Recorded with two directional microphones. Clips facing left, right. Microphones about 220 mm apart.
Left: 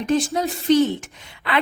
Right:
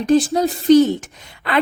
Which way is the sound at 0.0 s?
35° right (ahead or behind).